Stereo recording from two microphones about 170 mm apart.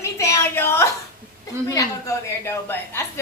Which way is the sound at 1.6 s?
20° left (ahead or behind).